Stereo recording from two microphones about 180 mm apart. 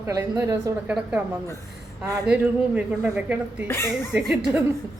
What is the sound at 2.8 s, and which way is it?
Speech, 5° right (ahead or behind).